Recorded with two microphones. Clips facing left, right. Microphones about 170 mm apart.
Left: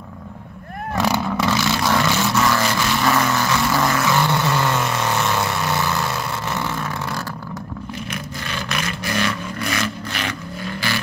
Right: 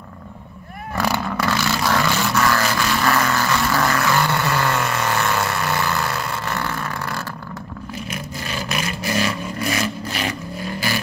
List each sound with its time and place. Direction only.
0.9 s vehicle: 15° left (ahead or behind)
1.2 s vehicle: 5° left (ahead or behind)
9.0 s vehicle: 35° right (ahead or behind)